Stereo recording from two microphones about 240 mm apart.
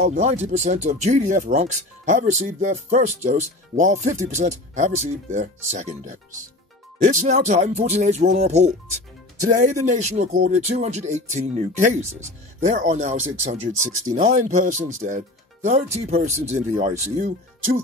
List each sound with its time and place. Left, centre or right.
0.0 s speech: right